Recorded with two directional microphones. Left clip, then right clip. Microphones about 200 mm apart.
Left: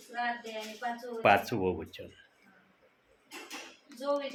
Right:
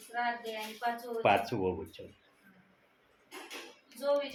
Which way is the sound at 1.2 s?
25° left (ahead or behind).